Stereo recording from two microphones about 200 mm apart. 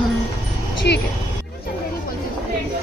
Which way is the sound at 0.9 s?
55° left (ahead or behind).